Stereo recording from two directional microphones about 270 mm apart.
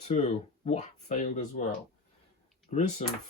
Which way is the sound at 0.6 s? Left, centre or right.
Left.